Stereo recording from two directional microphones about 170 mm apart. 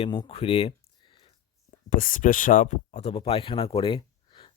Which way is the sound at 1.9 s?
55° left (ahead or behind).